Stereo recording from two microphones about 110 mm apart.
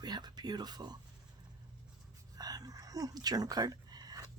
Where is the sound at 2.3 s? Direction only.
35° right (ahead or behind).